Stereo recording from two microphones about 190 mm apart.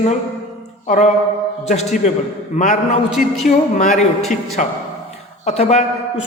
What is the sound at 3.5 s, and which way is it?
A man's voice, 40° left (ahead or behind).